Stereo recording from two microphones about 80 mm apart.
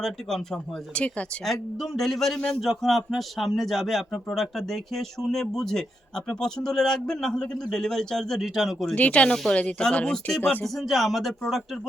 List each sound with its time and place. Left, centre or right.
0.0 s speech: centre
1.8 s a man's voice: centre
9.0 s speech: centre
10.6 s a man's voice: centre